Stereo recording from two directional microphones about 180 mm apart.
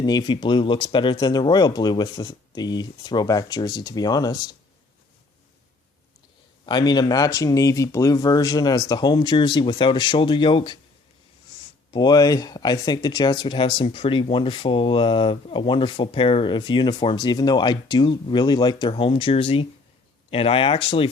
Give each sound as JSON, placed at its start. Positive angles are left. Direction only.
{"t": 0.0, "sound": "speech", "side_deg": 25}
{"t": 6.7, "sound": "speech", "side_deg": 25}
{"t": 11.9, "sound": "speech", "side_deg": 25}